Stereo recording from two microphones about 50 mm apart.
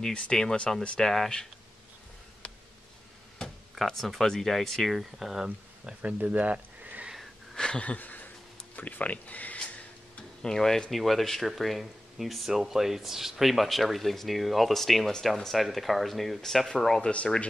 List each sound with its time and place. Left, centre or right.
0.0 s speech: centre
2.4 s a sound: left
3.7 s speech: centre
6.0 s speech: right
7.5 s a sound: centre
7.8 s speech: left
10.4 s speech: centre
17.0 s speech: left